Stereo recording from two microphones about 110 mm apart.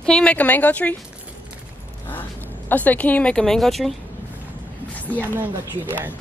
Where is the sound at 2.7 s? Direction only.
15° left (ahead or behind).